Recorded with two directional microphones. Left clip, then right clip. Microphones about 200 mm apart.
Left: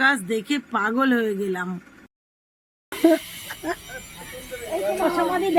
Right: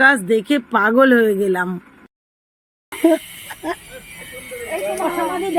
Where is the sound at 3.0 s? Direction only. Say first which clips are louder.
Right 3 dB; 15° right (ahead or behind).